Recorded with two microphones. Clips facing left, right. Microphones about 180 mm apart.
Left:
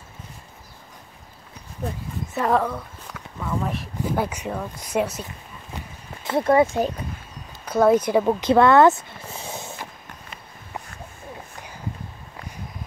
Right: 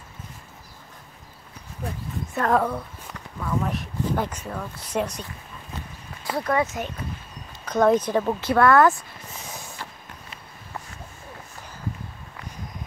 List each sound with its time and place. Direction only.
2.3 s speech: centre (ahead or behind)
6.2 s speech: 25° left (ahead or behind)
7.6 s speech: 10° left (ahead or behind); by 9.8 s 25° left (ahead or behind)